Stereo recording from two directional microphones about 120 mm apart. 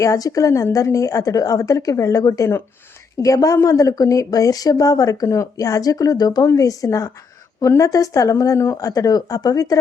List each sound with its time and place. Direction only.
0.0 s a woman's voice: 30° left (ahead or behind)